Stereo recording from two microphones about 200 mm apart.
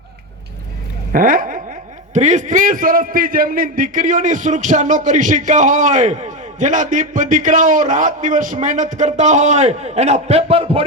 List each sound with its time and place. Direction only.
1.1 s speech: 45° right (ahead or behind); by 10.8 s 30° right (ahead or behind)